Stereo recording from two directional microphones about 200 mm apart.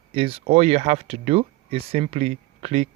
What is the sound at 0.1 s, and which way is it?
Speech, 30° right (ahead or behind).